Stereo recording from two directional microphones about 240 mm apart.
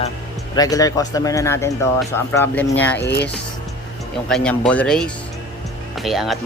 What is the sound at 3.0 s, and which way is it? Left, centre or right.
Speech, left.